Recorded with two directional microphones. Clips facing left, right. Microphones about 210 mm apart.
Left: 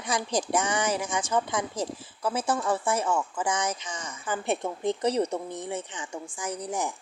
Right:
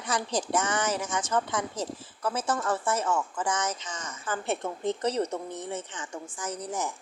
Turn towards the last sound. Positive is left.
turn(degrees=15)  # may be behind; listen again after turning